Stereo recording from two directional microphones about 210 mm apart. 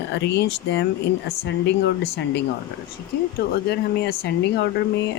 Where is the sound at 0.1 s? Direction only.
55° left (ahead or behind).